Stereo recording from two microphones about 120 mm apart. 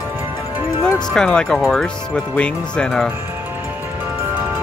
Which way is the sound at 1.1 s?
5° left (ahead or behind).